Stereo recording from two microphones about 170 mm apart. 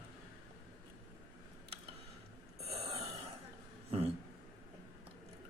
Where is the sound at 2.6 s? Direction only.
35° right (ahead or behind).